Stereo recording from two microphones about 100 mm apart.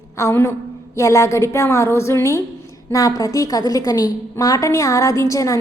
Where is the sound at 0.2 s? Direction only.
30° left (ahead or behind).